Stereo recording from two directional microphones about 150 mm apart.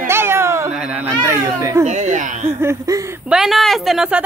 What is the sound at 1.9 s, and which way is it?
Speech, 55° right (ahead or behind).